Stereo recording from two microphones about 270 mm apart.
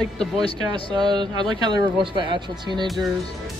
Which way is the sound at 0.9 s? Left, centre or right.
Centre.